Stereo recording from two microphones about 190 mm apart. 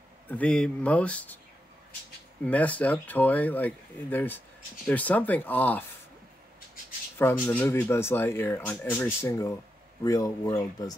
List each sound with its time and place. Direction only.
0.3 s speech: 5° left (ahead or behind)
2.4 s speech: 5° left (ahead or behind)
7.2 s speech: 10° left (ahead or behind)